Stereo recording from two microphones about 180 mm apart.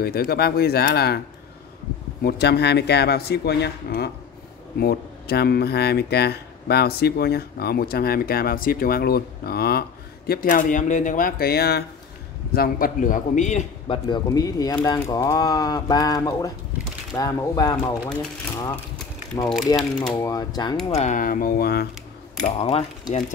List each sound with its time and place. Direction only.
0.0 s speech: 60° left (ahead or behind)
2.2 s a man's voice: 65° left (ahead or behind); by 13.7 s 40° left (ahead or behind)
13.8 s speech: 25° left (ahead or behind)
19.8 s speech: centre (ahead or behind)
20.2 s speech: 20° left (ahead or behind)
20.9 s a man's voice: 40° left (ahead or behind); by 21.8 s 60° left (ahead or behind)
22.4 s speech: 35° left (ahead or behind)